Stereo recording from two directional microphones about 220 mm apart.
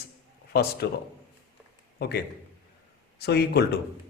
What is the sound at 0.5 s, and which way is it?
Speech, 45° left (ahead or behind).